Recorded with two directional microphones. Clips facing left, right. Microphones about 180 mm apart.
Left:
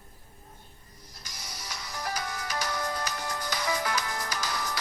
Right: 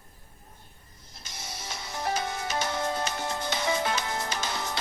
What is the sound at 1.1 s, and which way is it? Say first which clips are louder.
Music: right 4 dB; 25° right (ahead or behind).